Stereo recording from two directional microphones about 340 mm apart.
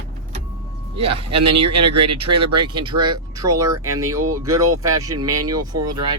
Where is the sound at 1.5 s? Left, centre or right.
Right.